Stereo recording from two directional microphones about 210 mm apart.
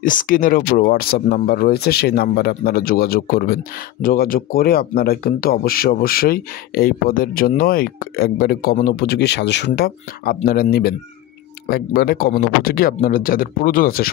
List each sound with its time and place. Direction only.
0.0 s a man's voice: 40° left (ahead or behind)